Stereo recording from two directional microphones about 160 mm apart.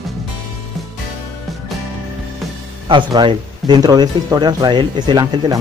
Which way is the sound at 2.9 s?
30° right (ahead or behind).